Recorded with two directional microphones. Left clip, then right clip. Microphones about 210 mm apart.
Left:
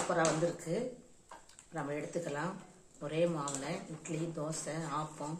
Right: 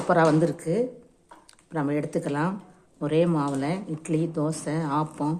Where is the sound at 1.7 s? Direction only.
50° right (ahead or behind).